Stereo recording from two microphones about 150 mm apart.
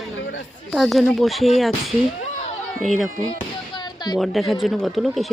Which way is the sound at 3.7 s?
30° left (ahead or behind).